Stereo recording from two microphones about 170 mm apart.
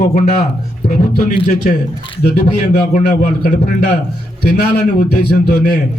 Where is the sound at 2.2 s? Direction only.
50° left (ahead or behind).